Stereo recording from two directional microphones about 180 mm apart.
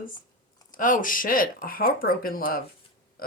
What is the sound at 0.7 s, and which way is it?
Speech, 50° left (ahead or behind).